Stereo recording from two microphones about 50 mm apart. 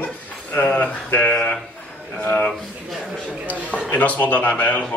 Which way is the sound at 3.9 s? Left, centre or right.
Left.